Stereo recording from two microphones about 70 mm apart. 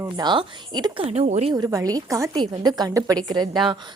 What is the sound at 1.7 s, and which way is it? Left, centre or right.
Speech, right.